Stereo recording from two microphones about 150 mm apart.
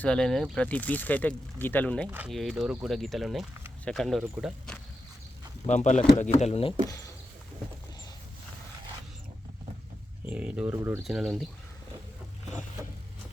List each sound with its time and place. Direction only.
0.0 s speech: 5° left (ahead or behind)
2.0 s speech: 10° right (ahead or behind)
2.3 s speech: centre (ahead or behind)
5.6 s speech: 50° left (ahead or behind)
10.2 s speech: 10° right (ahead or behind)
11.0 s speech: centre (ahead or behind)